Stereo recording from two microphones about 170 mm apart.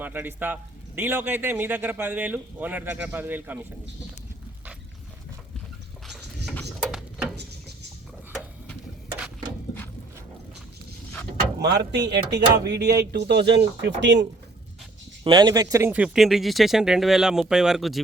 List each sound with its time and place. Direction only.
0.0 s a man's voice: 10° right (ahead or behind)
6.1 s a sound: centre (ahead or behind)
11.6 s speech: 80° right
15.2 s speech: 25° right (ahead or behind)
15.9 s speech: 5° right (ahead or behind)